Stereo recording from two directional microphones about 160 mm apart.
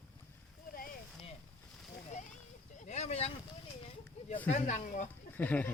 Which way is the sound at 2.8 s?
45° left (ahead or behind).